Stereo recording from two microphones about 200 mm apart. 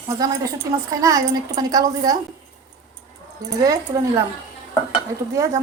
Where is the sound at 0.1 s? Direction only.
15° right (ahead or behind).